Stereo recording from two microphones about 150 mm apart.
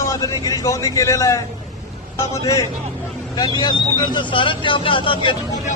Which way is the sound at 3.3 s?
30° left (ahead or behind).